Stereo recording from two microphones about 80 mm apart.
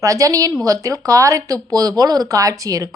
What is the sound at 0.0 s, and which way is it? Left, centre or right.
Speech, right.